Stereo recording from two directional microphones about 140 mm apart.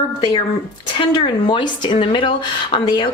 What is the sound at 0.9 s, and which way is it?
A woman's voice, 35° left (ahead or behind).